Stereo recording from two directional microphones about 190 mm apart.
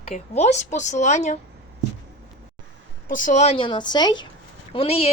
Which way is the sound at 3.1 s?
45° left (ahead or behind).